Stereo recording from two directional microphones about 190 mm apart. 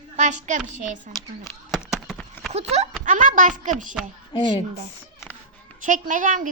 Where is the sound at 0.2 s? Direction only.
40° right (ahead or behind).